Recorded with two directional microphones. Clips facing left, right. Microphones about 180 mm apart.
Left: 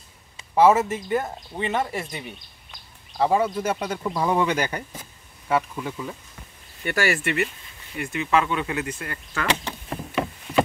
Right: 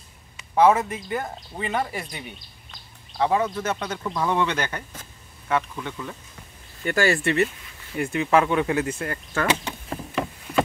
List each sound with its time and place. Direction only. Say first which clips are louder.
0.6 s speech: left 1 dB; 5° left (ahead or behind)
7.1 s speech: right 4 dB; 30° right (ahead or behind)
8.0 s speech: right 3 dB; 45° right (ahead or behind)
9.8 s a sound: left 1 dB; 5° left (ahead or behind)